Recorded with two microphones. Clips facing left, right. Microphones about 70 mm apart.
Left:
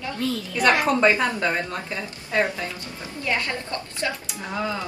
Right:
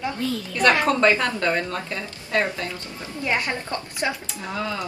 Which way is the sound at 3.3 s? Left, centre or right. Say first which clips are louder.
Right 1 dB; right.